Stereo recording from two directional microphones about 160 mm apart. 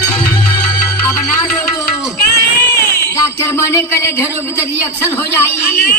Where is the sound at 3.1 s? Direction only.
15° left (ahead or behind).